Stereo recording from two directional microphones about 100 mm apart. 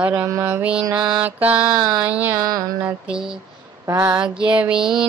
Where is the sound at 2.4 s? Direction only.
40° right (ahead or behind).